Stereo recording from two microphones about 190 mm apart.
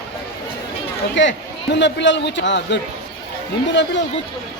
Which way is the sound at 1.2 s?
70° left (ahead or behind).